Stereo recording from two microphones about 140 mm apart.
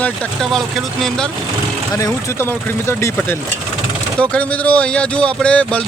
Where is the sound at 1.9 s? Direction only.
20° left (ahead or behind).